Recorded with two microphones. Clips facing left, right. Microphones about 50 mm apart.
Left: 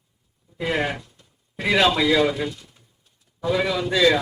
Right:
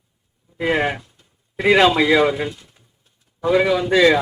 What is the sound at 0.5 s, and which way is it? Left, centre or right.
A man's voice, right.